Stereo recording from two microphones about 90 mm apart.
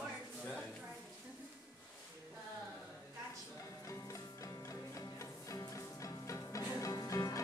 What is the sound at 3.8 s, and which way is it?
Music, 35° left (ahead or behind).